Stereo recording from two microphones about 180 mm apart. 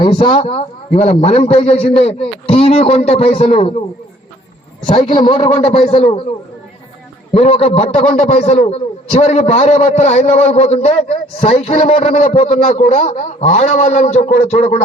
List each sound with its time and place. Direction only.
0.0 s a man's voice: 25° left (ahead or behind)
4.9 s a man's voice: 25° left (ahead or behind)
7.3 s a man's voice: 35° left (ahead or behind)
13.0 s a man's voice: 35° left (ahead or behind)